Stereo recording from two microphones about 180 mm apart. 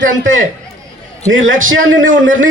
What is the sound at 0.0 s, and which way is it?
A man's voice, 90° right.